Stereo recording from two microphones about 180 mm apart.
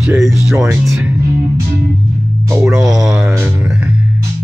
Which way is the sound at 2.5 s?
5° right (ahead or behind).